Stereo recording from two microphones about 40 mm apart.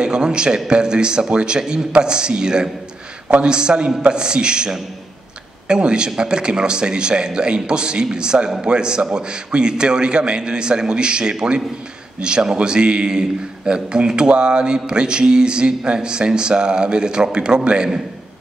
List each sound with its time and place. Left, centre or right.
0.0 s speech: right